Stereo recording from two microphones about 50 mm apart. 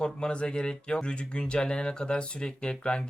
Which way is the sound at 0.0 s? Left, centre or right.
Centre.